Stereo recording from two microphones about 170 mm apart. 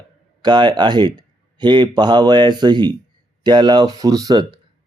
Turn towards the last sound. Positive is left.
turn(degrees=-25)  # may be behind; listen again after turning